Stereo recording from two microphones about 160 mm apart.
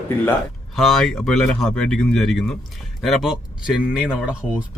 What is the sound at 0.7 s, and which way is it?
Speech, centre (ahead or behind).